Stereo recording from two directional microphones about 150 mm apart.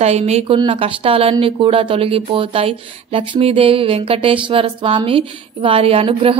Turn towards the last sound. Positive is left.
turn(degrees=-40)  # may be behind; listen again after turning